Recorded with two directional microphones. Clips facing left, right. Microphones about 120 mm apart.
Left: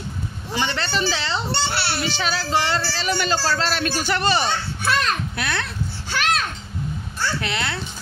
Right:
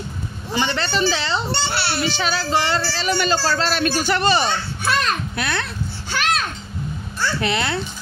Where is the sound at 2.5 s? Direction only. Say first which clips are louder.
Right 1 dB; 75° right (ahead or behind).